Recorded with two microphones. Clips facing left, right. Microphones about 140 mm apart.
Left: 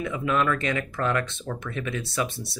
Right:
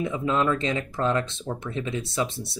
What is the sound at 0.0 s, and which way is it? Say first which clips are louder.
Speech: right 1 dB; 25° right (ahead or behind).